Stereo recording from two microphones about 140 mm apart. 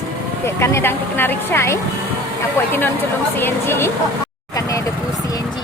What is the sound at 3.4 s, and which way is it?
Speech, 15° left (ahead or behind).